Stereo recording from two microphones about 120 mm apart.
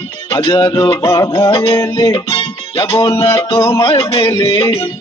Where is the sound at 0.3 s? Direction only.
55° left (ahead or behind).